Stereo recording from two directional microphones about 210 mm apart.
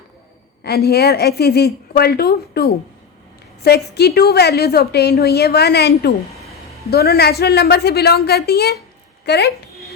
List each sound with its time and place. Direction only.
0.6 s a woman's voice: 50° left (ahead or behind)